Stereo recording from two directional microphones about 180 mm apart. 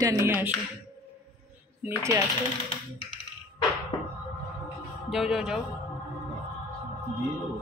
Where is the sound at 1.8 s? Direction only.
15° right (ahead or behind).